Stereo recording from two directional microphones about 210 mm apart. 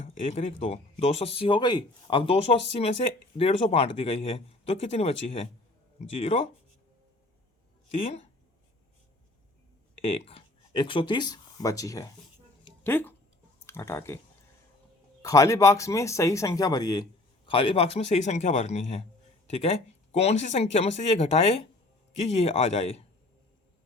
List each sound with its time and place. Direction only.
0.1 s speech: 30° left (ahead or behind)
7.9 s speech: 30° left (ahead or behind)
10.0 s speech: 25° left (ahead or behind); by 14.2 s 10° left (ahead or behind)
15.2 s speech: 15° left (ahead or behind); by 23.0 s 30° left (ahead or behind)